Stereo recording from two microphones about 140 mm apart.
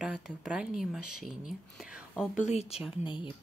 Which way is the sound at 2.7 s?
45° left (ahead or behind).